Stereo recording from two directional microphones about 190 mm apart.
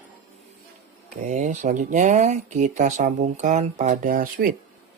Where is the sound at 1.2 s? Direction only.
40° right (ahead or behind).